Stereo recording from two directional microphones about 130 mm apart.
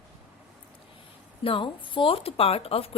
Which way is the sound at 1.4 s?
40° left (ahead or behind).